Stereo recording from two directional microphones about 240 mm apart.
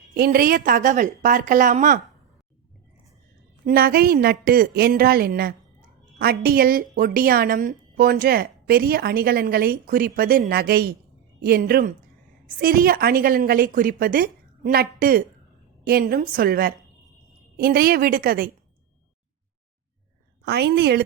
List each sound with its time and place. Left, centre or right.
0.1 s a woman's voice: right
3.7 s a woman's voice: right
20.4 s a woman's voice: right